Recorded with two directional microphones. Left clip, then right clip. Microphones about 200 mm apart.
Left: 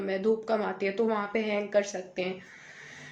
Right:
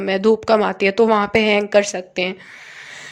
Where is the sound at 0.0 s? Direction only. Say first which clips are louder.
Right 11 dB; 50° right (ahead or behind).